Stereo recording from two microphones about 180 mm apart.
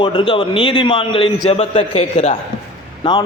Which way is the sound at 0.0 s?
30° left (ahead or behind).